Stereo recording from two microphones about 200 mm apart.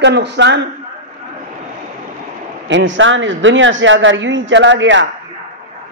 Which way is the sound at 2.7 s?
70° right (ahead or behind).